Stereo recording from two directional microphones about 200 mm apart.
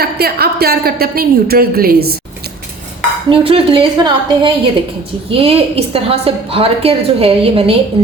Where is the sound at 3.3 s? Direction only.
25° right (ahead or behind).